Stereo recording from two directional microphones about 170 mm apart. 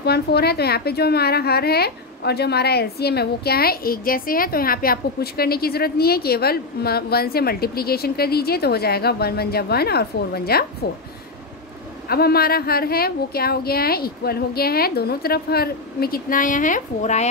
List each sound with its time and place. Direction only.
0.0 s a woman's voice: 70° left (ahead or behind)
12.1 s a woman's voice: 65° left (ahead or behind); by 17.3 s 45° left (ahead or behind)